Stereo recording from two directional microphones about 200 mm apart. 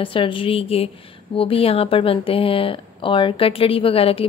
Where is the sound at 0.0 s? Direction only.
25° left (ahead or behind).